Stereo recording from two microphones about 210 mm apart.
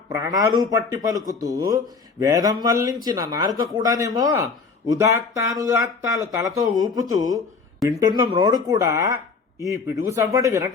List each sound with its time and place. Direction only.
0.1 s a man's voice: 15° right (ahead or behind)